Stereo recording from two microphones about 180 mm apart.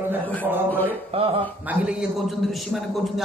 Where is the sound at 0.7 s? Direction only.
10° left (ahead or behind).